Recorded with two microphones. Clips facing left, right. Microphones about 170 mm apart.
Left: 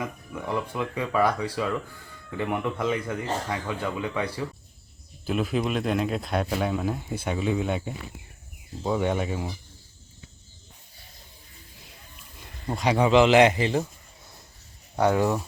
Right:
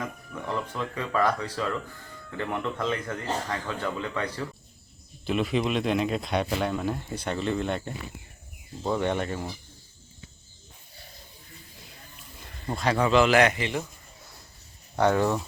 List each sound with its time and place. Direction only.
0.0 s speech: 10° left (ahead or behind)
12.6 s a man's voice: 15° left (ahead or behind); by 13.8 s 35° left (ahead or behind)
14.9 s speech: 10° left (ahead or behind)